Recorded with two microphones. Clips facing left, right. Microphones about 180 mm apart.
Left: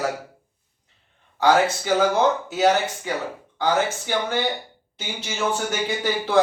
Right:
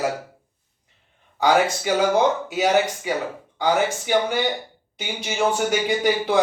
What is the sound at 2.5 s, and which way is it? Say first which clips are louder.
Speech: even; 15° right (ahead or behind).